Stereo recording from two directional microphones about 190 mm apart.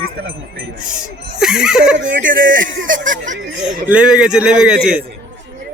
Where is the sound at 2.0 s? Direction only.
75° right (ahead or behind).